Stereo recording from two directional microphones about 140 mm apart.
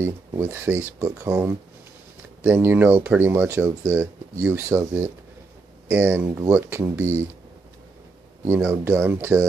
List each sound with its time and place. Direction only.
0.0 s speech: 20° right (ahead or behind)
8.5 s speech: 15° right (ahead or behind)